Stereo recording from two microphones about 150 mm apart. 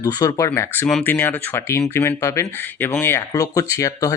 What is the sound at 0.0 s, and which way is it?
Speech, 25° left (ahead or behind).